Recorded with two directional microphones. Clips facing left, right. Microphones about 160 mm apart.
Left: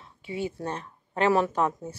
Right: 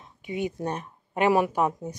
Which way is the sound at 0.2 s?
20° right (ahead or behind).